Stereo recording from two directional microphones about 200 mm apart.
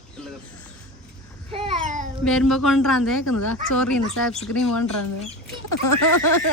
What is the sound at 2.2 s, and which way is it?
A man's voice, centre (ahead or behind).